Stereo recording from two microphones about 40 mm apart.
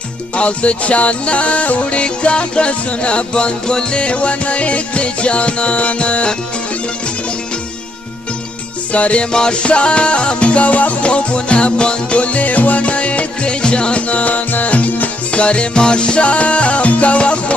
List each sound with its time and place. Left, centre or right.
0.4 s music: left
8.9 s music: left
9.3 s music: left
15.3 s music: left